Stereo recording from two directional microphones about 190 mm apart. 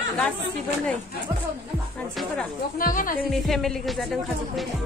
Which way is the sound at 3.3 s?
Centre (ahead or behind).